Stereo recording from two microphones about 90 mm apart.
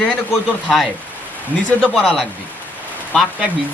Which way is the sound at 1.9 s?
5° left (ahead or behind).